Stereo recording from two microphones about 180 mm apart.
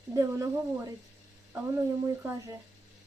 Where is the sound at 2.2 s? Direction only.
15° right (ahead or behind).